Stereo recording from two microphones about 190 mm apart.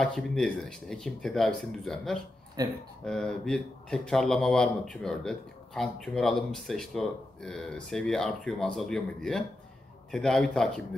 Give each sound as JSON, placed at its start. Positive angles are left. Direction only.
{"t": 0.0, "sound": "speech", "side_deg": 5}
{"t": 2.6, "sound": "speech", "side_deg": -20}
{"t": 3.1, "sound": "speech", "side_deg": 5}